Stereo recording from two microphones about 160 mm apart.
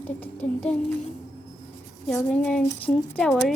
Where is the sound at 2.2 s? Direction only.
5° left (ahead or behind).